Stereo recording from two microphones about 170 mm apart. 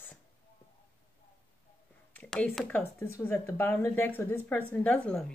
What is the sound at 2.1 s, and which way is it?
Speech, 5° left (ahead or behind).